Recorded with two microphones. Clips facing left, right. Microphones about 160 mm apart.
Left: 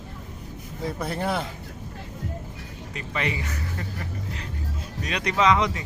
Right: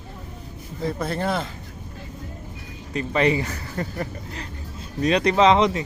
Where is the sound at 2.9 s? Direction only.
35° right (ahead or behind).